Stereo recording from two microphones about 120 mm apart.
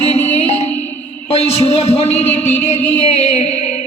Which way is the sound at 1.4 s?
65° left (ahead or behind).